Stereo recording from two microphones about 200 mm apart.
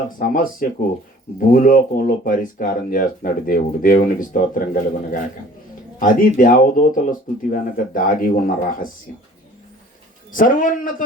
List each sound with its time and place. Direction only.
0.2 s speech: 45° left (ahead or behind)
10.3 s speech: 40° left (ahead or behind)